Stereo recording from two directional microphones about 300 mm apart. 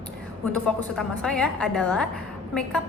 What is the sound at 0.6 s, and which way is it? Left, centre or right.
A woman's voice, centre.